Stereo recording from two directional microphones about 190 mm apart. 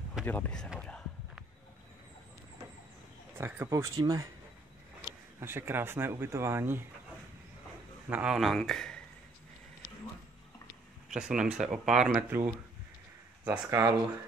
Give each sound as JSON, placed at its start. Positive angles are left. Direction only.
{"t": 0.2, "sound": "a sound", "side_deg": 10}
{"t": 3.3, "sound": "speech", "side_deg": -10}
{"t": 8.1, "sound": "speech", "side_deg": -5}
{"t": 11.1, "sound": "speech", "side_deg": -5}